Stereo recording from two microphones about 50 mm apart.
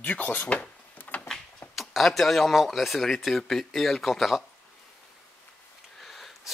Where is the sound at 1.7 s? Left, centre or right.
Centre.